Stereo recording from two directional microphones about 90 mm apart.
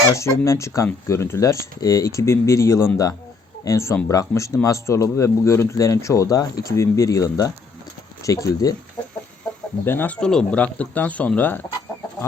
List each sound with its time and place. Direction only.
0.1 s a man's voice: 35° left (ahead or behind)
9.8 s speech: 25° left (ahead or behind)
10.2 s speech: 10° left (ahead or behind)